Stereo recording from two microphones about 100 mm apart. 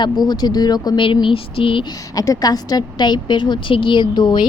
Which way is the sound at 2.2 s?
40° left (ahead or behind).